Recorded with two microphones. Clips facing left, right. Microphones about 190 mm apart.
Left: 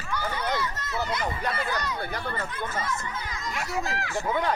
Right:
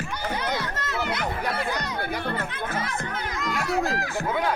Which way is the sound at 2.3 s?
65° right (ahead or behind).